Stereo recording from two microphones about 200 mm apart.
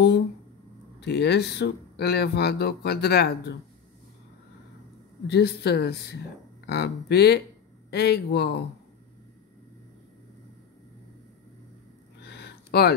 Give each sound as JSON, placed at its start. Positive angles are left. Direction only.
{"t": 1.0, "sound": "speech", "side_deg": 55}
{"t": 5.2, "sound": "speech", "side_deg": 55}
{"t": 12.2, "sound": "a sound", "side_deg": 55}